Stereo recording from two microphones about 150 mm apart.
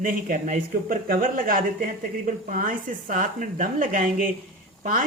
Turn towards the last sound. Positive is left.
turn(degrees=-65)  # may be behind; listen again after turning